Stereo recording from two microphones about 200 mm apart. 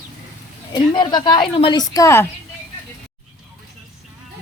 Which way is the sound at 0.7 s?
20° left (ahead or behind).